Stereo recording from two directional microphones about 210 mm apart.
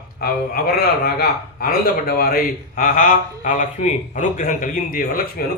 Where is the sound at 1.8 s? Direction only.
45° left (ahead or behind).